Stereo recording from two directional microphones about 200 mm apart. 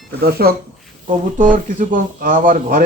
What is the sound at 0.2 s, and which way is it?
Speech, 50° right (ahead or behind).